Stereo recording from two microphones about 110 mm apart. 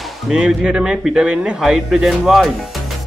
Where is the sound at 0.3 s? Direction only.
5° right (ahead or behind).